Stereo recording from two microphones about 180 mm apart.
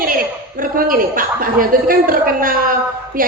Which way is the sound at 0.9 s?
50° right (ahead or behind).